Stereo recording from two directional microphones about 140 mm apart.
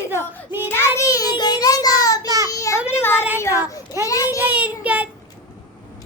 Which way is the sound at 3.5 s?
15° right (ahead or behind).